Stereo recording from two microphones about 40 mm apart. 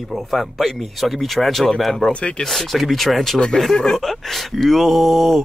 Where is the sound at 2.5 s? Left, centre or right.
Centre.